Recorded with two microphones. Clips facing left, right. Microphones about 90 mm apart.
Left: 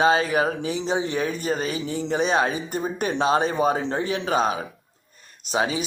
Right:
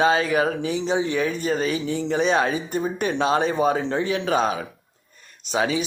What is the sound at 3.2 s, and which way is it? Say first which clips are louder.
A man's voice: even; 30° left (ahead or behind).